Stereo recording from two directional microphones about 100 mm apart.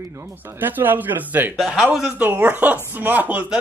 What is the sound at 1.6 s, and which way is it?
Speech, 5° right (ahead or behind).